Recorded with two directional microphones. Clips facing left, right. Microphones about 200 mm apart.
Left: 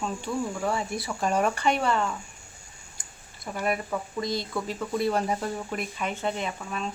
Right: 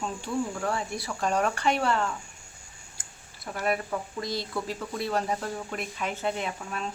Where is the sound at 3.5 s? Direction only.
Centre (ahead or behind).